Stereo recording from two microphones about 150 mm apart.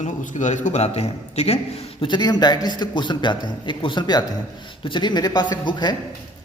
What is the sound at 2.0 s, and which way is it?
A man's voice, 30° left (ahead or behind).